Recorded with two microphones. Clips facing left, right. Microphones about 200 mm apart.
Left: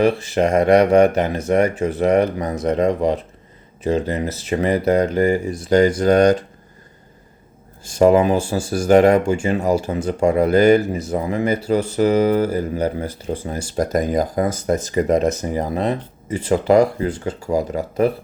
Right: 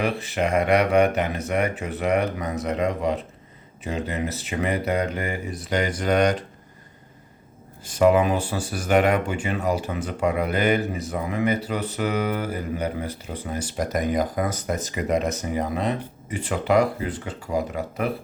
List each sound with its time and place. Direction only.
0.0 s speech: 40° left (ahead or behind)
7.9 s speech: 40° left (ahead or behind)